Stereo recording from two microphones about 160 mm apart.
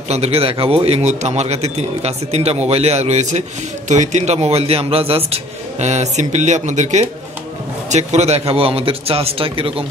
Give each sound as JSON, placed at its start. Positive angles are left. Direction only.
{"t": 0.1, "sound": "a man's voice", "side_deg": -40}